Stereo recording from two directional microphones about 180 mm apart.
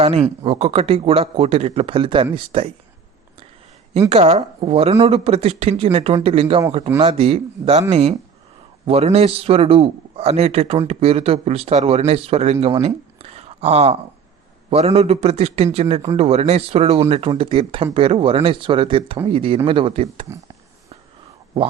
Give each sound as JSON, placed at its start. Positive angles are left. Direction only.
{"t": 0.0, "sound": "a man's voice", "side_deg": -35}
{"t": 4.1, "sound": "a man's voice", "side_deg": -35}